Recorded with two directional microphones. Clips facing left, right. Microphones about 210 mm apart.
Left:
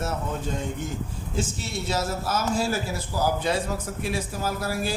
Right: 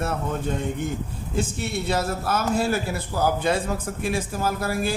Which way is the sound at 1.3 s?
60° right (ahead or behind).